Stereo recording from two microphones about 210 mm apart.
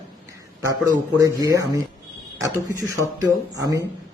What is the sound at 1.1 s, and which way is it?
Speech, 15° right (ahead or behind).